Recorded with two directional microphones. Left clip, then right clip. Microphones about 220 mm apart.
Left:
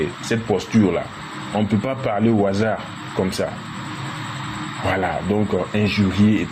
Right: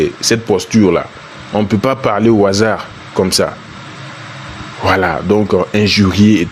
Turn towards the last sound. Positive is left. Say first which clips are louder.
# right 8 dB
turn(degrees=-50)  # may be behind; listen again after turning